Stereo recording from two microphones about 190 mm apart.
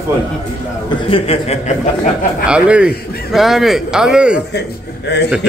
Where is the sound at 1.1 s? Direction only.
30° left (ahead or behind).